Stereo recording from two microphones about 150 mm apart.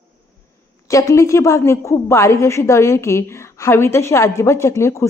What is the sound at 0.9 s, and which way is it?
A woman's voice, 20° left (ahead or behind).